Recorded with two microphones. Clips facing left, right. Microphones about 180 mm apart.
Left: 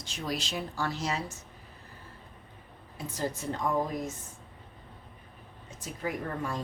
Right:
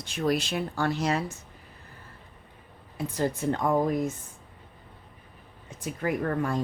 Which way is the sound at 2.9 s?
55° right (ahead or behind).